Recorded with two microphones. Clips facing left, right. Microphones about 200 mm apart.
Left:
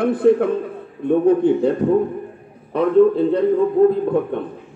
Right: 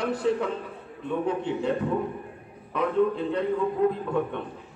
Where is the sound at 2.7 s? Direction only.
35° left (ahead or behind).